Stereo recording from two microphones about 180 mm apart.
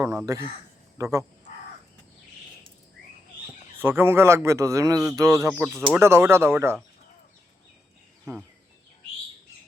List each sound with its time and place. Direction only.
0.3 s speech: 15° right (ahead or behind)
3.8 s speech: 10° right (ahead or behind)
8.2 s speech: 5° left (ahead or behind)